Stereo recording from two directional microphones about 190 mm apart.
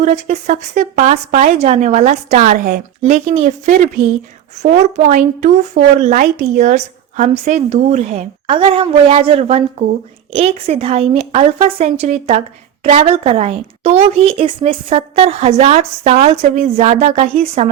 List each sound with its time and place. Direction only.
0.0 s a woman's voice: 40° right (ahead or behind)
2.4 s a woman's voice: 45° right (ahead or behind)
3.0 s a woman's voice: 35° right (ahead or behind)